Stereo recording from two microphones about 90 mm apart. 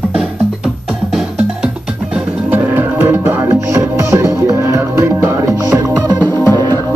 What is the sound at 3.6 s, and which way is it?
Music, 30° right (ahead or behind).